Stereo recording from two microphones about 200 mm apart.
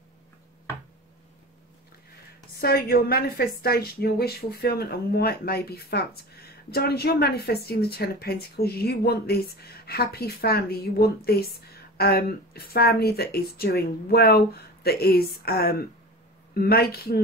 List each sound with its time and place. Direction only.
2.6 s a woman's voice: 50° left (ahead or behind)